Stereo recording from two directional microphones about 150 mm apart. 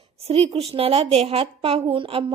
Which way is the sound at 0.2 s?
40° right (ahead or behind).